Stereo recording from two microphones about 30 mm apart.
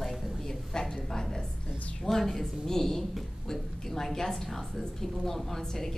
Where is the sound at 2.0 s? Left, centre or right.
Centre.